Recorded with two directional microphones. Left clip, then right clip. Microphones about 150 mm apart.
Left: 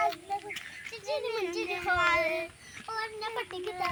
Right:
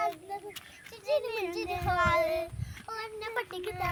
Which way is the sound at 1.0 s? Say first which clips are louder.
Right 2 dB; 40° right (ahead or behind).